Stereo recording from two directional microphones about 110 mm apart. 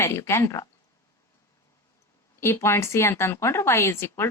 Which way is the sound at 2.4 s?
25° left (ahead or behind).